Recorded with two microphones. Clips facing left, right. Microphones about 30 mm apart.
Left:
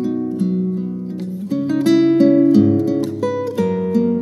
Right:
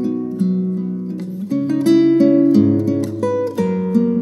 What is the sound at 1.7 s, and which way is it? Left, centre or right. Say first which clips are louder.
Music: right 1 dB; centre.